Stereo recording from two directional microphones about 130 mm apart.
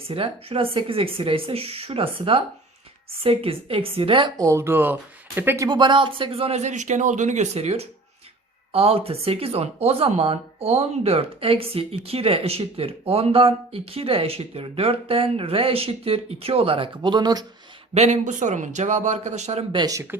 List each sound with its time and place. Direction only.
0.1 s speech: 45° right (ahead or behind)
4.4 s speech: 25° right (ahead or behind)
5.6 s speech: 35° right (ahead or behind)
17.9 s speech: 60° right (ahead or behind)
19.7 s speech: 30° right (ahead or behind)